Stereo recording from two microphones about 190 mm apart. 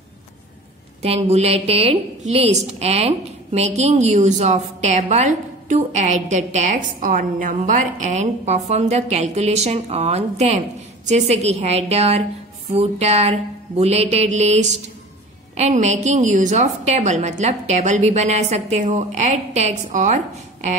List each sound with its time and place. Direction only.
1.0 s a woman's voice: 35° right (ahead or behind)